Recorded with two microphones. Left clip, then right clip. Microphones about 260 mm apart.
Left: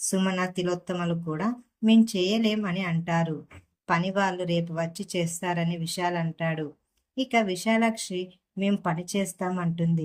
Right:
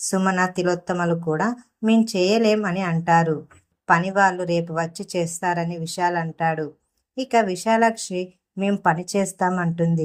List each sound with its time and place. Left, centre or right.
0.0 s speech: centre
1.9 s speech: centre
3.8 s speech: centre